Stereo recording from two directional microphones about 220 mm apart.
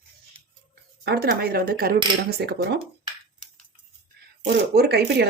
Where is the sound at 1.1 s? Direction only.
45° right (ahead or behind).